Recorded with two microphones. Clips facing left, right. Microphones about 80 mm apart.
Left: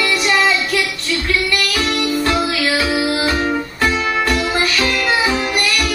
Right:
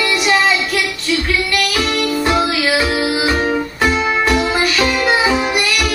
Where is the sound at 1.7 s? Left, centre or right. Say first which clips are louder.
Right 1 dB; centre.